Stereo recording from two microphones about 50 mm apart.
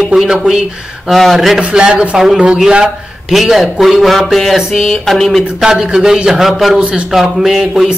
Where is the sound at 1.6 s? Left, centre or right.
Centre.